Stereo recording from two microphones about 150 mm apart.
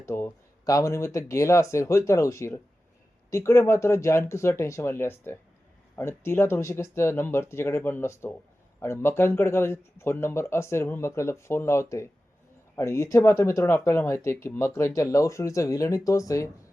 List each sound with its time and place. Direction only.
0.0 s speech: 15° left (ahead or behind)